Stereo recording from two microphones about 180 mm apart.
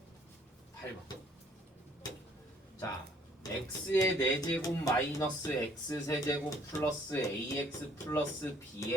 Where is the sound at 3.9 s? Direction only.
20° left (ahead or behind).